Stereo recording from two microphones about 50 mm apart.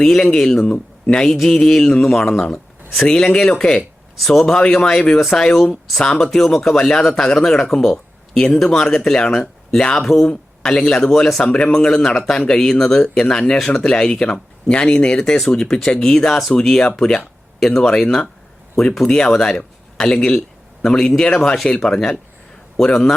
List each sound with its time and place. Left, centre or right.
0.0 s speech: centre
0.6 s speech: left
1.1 s speech: centre
4.2 s speech: centre